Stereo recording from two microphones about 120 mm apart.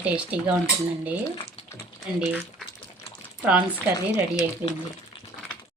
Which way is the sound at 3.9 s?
30° left (ahead or behind).